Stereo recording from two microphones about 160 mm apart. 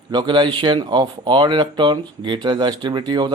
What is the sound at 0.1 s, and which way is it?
Speech, 30° right (ahead or behind).